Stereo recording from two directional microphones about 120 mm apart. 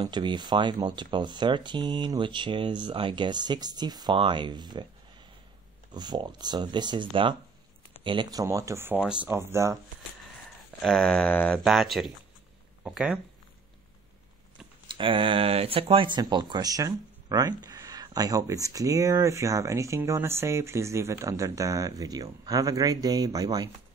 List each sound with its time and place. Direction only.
0.0 s speech: 40° right (ahead or behind)
5.9 s speech: 35° right (ahead or behind); by 9.0 s 20° right (ahead or behind)
9.0 s speech: 10° right (ahead or behind)
9.3 s speech: 20° right (ahead or behind)
10.8 s a sound: 5° left (ahead or behind)
11.6 s speech: centre (ahead or behind)
14.9 s speech: 45° right (ahead or behind)
16.2 s speech: 40° right (ahead or behind)